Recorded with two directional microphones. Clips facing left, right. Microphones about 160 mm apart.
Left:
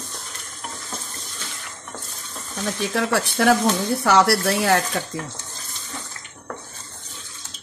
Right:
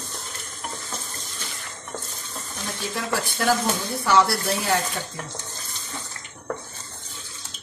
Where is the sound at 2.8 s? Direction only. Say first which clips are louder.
Left 5 dB; 70° left (ahead or behind).